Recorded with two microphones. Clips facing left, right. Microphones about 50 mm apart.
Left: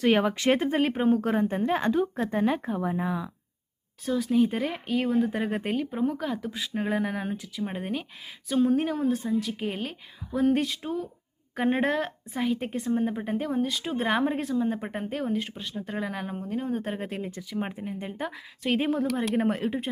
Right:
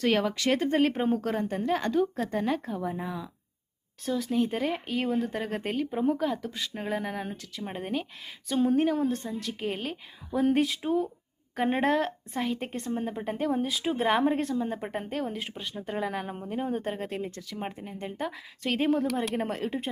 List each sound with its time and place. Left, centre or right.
0.0 s speech: centre
0.7 s a woman's voice: centre
4.0 s a woman's voice: centre
11.5 s a woman's voice: centre
16.8 s a woman's voice: centre